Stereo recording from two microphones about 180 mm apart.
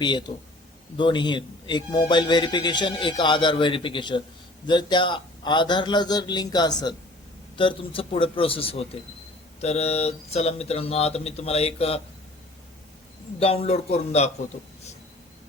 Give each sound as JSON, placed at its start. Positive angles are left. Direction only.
{"t": 0.0, "sound": "a man's voice", "side_deg": 25}
{"t": 13.4, "sound": "speech", "side_deg": 35}